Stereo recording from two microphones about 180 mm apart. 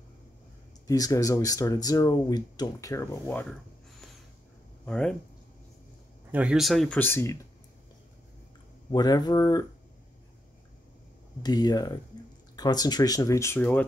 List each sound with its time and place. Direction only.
0.8 s speech: 20° left (ahead or behind)
4.8 s speech: 5° left (ahead or behind)
6.3 s speech: 5° right (ahead or behind)
7.0 s speech: 10° left (ahead or behind)
8.9 s speech: 20° left (ahead or behind)
11.4 s speech: 20° left (ahead or behind)